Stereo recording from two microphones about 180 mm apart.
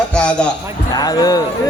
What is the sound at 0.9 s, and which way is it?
Speech, 20° left (ahead or behind).